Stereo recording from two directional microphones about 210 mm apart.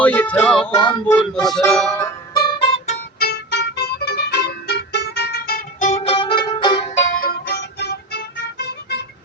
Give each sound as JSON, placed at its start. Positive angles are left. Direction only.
{"t": 0.0, "sound": "music", "side_deg": 5}
{"t": 0.7, "sound": "a sound", "side_deg": 20}
{"t": 1.1, "sound": "speech", "side_deg": 0}
{"t": 2.0, "sound": "music", "side_deg": 20}
{"t": 3.2, "sound": "music", "side_deg": 50}
{"t": 7.2, "sound": "music", "side_deg": 45}